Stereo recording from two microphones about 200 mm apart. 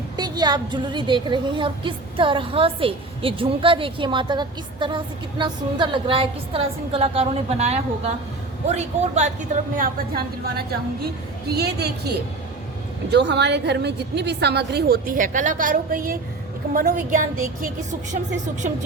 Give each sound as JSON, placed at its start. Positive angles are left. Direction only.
{"t": 0.2, "sound": "a woman's voice", "side_deg": -20}
{"t": 9.7, "sound": "speech", "side_deg": -50}
{"t": 13.1, "sound": "a woman's voice", "side_deg": -60}